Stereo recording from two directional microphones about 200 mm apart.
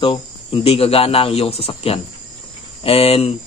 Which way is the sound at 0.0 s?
30° left (ahead or behind).